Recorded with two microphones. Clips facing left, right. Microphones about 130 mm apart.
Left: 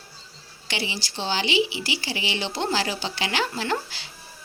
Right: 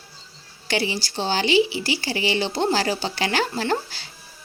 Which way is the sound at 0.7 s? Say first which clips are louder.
Right 6 dB; 40° right (ahead or behind).